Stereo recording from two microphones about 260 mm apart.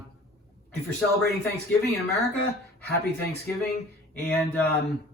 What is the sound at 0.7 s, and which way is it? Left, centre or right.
Speech, right.